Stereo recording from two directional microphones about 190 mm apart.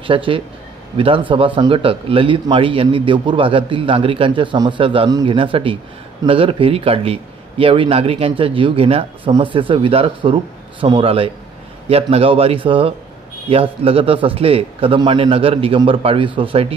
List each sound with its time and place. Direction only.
0.0 s speech: 25° right (ahead or behind)